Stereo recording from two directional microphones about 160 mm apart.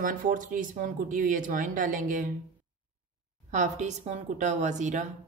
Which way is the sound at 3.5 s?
50° right (ahead or behind).